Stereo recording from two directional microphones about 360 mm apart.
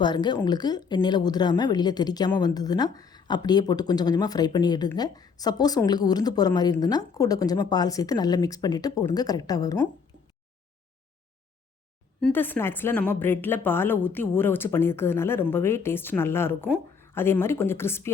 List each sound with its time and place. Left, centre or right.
0.0 s a woman's voice: centre
12.2 s a woman's voice: centre